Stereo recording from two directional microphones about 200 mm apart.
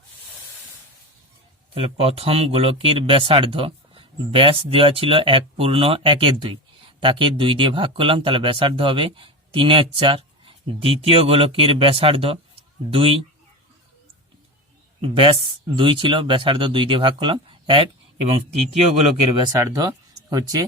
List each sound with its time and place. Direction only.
1.7 s speech: 30° right (ahead or behind)
15.0 s speech: 25° right (ahead or behind)
19.5 s speech: 15° right (ahead or behind)